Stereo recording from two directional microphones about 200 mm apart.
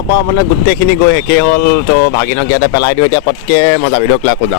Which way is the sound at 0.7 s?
55° left (ahead or behind).